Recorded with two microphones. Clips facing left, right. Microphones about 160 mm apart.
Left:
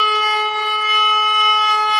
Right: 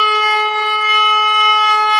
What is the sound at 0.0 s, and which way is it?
Siren, 90° right.